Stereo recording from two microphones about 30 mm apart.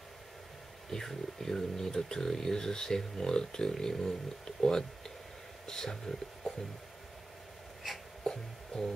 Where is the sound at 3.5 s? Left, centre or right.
Centre.